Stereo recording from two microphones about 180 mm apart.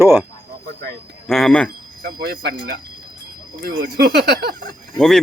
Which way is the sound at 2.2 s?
60° right (ahead or behind).